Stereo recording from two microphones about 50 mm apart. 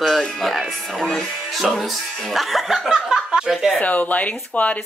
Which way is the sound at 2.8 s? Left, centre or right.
Centre.